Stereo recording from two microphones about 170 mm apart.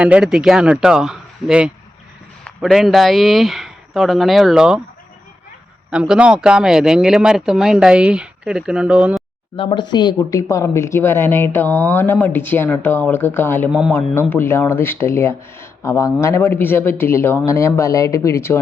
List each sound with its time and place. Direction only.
0.0 s speech: 5° right (ahead or behind)
5.9 s speech: 5° right (ahead or behind)
9.6 s speech: 30° left (ahead or behind); by 13.7 s 15° left (ahead or behind)
13.7 s speech: 5° right (ahead or behind)
14.2 s speech: 15° left (ahead or behind)